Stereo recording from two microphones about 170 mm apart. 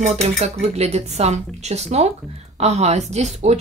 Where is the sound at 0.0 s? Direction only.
40° right (ahead or behind).